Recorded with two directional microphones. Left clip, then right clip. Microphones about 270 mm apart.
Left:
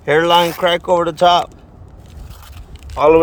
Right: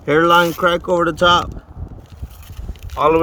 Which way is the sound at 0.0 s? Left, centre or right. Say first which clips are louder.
Even; left.